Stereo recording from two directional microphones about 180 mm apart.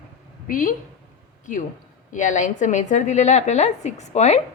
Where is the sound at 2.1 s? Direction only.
45° left (ahead or behind).